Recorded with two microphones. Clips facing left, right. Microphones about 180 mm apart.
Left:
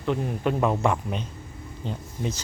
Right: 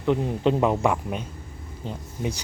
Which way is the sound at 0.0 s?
20° right (ahead or behind).